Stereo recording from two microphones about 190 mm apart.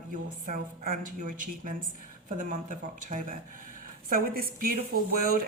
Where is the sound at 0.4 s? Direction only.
45° right (ahead or behind).